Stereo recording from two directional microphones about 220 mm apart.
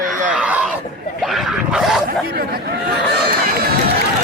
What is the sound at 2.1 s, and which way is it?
Chatter, 45° right (ahead or behind).